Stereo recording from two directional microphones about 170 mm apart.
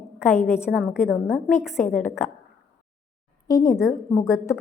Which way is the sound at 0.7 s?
Centre (ahead or behind).